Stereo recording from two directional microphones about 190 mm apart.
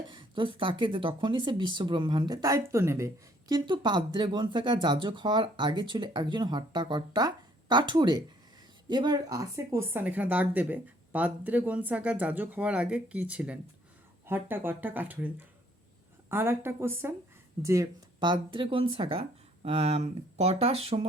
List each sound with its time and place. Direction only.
0.1 s speech: 25° right (ahead or behind)